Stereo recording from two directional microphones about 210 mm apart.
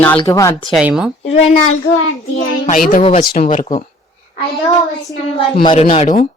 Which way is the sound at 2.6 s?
40° left (ahead or behind).